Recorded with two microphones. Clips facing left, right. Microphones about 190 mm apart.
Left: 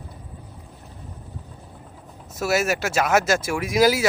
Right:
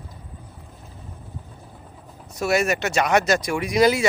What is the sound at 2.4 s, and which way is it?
Speech, 5° left (ahead or behind).